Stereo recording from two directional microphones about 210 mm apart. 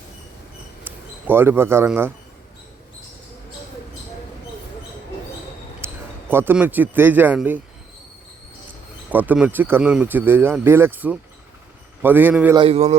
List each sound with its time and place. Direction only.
0.9 s speech: 10° right (ahead or behind)
5.8 s speech: 10° right (ahead or behind)
9.0 s speech: 5° right (ahead or behind)
12.5 s a man's voice: 25° right (ahead or behind)